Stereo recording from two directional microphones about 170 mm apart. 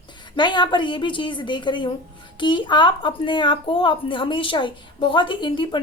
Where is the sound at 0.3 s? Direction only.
25° left (ahead or behind).